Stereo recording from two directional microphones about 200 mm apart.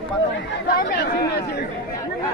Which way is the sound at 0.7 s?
50° left (ahead or behind).